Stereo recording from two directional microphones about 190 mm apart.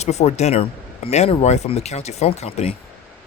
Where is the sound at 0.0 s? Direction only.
35° left (ahead or behind).